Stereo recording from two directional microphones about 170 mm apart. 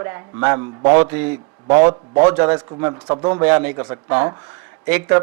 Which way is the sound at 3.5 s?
10° right (ahead or behind).